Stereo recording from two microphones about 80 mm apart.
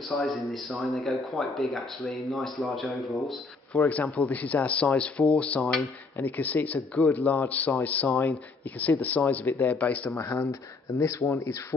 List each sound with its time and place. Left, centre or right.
0.1 s speech: centre
3.9 s speech: centre
9.2 s speech: centre
9.6 s speech: centre
10.5 s speech: left